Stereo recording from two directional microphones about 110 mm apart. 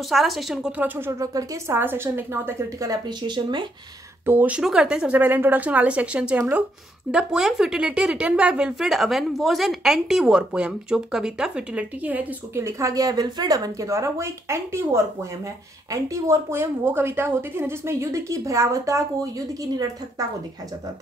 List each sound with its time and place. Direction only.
0.0 s speech: centre (ahead or behind); by 1.2 s 20° right (ahead or behind)
1.2 s a woman's voice: 30° right (ahead or behind)
1.8 s speech: 20° right (ahead or behind)
2.9 s speech: 45° right (ahead or behind)
4.3 s speech: 15° right (ahead or behind)
12.6 s speech: 30° right (ahead or behind)